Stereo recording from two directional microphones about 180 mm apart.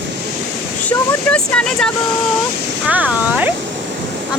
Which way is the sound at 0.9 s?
5° left (ahead or behind).